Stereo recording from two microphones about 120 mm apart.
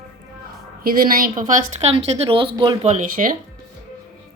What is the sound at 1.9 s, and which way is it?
Speech, 60° right (ahead or behind).